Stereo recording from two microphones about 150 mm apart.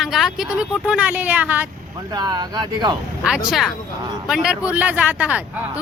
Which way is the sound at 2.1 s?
25° right (ahead or behind).